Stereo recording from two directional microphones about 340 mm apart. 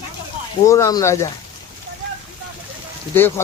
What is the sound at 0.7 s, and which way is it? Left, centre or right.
Speech, centre.